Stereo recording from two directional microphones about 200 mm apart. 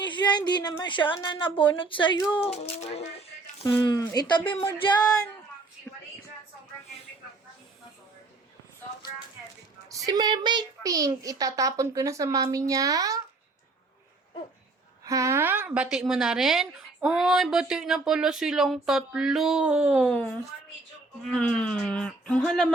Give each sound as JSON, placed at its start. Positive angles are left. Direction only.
{"t": 0.0, "sound": "a woman's voice", "side_deg": 20}
{"t": 3.8, "sound": "a woman's voice", "side_deg": 15}
{"t": 9.9, "sound": "a child's voice", "side_deg": -20}
{"t": 15.0, "sound": "speech", "side_deg": -15}